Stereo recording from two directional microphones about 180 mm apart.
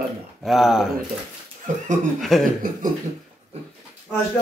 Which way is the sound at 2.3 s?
Centre (ahead or behind).